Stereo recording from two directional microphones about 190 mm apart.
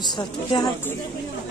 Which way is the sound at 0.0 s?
25° left (ahead or behind).